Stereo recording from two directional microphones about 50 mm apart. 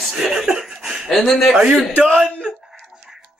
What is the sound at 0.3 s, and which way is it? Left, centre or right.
Laughter, centre.